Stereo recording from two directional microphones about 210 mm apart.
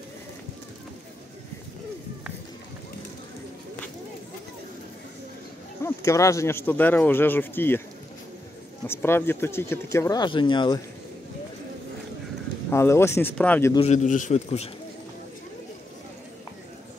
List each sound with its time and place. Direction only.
5.8 s speech: 15° left (ahead or behind)
8.8 s speech: 10° left (ahead or behind)
12.6 s speech: 10° left (ahead or behind)
13.7 s a man's voice: 30° left (ahead or behind)